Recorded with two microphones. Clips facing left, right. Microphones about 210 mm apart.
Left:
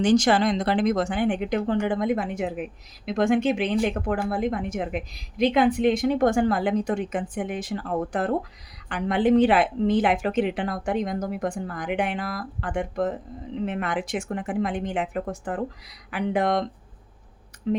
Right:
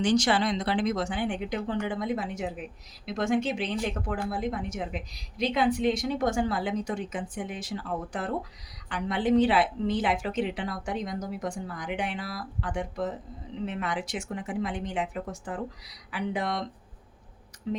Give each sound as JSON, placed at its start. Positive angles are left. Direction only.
{"t": 0.0, "sound": "speech", "side_deg": 45}
{"t": 17.7, "sound": "speech", "side_deg": 65}